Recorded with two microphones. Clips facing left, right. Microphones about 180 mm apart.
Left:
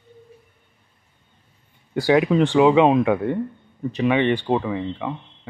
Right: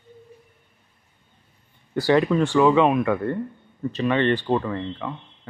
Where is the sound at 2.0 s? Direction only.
15° left (ahead or behind).